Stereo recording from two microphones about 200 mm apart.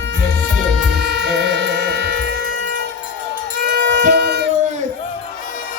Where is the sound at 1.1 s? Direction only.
60° right (ahead or behind).